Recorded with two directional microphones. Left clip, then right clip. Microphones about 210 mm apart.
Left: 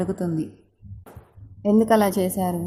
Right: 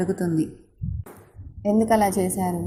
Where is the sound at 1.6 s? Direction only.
15° left (ahead or behind).